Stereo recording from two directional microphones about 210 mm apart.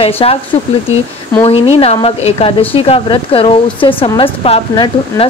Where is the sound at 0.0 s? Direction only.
25° left (ahead or behind).